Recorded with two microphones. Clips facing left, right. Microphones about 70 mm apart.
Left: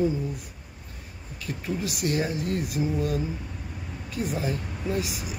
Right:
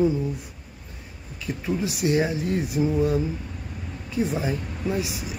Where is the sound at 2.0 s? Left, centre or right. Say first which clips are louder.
Right 4 dB; centre.